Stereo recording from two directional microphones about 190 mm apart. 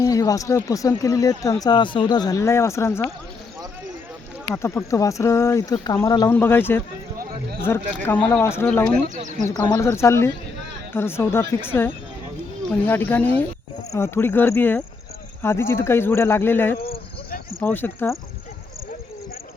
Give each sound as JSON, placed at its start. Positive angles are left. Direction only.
{"t": 0.0, "sound": "speech", "side_deg": 20}
{"t": 4.5, "sound": "speech", "side_deg": 15}